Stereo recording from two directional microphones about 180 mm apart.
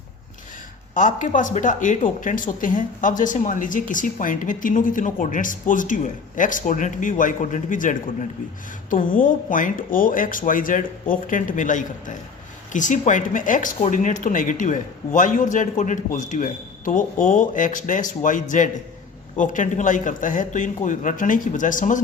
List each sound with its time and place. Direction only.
0.9 s speech: 45° left (ahead or behind)